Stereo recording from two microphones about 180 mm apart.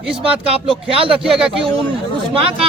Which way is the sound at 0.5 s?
30° right (ahead or behind).